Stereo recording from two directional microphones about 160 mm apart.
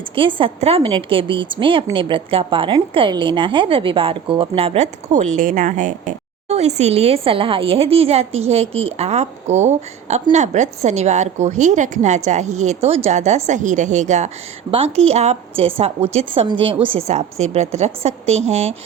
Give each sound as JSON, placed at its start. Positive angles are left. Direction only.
{"t": 0.2, "sound": "a woman's voice", "side_deg": -30}
{"t": 17.1, "sound": "a woman's voice", "side_deg": -45}